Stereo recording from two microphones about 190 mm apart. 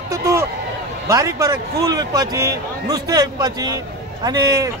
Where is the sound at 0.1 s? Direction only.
15° right (ahead or behind).